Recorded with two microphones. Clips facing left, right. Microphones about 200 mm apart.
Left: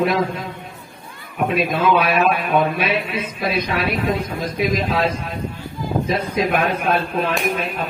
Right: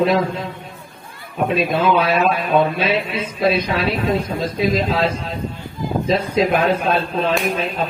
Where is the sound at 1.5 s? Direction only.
30° right (ahead or behind).